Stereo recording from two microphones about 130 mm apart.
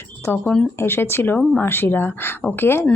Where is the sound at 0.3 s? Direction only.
10° left (ahead or behind).